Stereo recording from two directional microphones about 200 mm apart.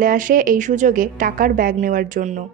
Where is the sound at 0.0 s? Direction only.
40° right (ahead or behind).